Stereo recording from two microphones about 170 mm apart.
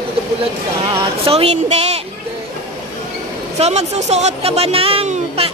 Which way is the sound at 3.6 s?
40° right (ahead or behind).